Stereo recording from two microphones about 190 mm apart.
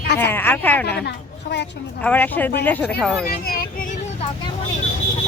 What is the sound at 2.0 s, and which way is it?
A woman's voice, 10° left (ahead or behind).